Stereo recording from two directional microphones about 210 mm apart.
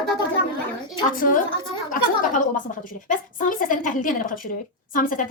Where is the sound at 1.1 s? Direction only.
40° left (ahead or behind).